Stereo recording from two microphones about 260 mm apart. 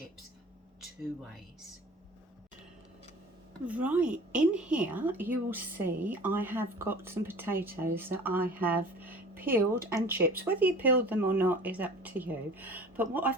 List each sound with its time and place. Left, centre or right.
3.7 s a woman's voice: centre